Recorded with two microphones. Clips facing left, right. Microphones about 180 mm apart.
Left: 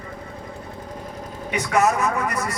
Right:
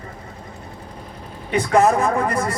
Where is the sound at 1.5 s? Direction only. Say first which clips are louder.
Right 4 dB; 30° right (ahead or behind).